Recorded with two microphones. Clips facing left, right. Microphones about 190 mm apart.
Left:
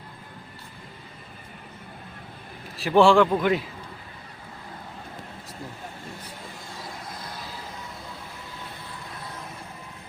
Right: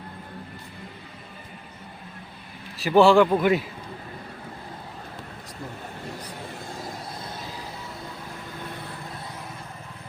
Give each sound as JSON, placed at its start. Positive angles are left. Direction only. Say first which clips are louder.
{"t": 2.7, "sound": "a man's voice", "louder": "right 1 dB", "side_deg": 0}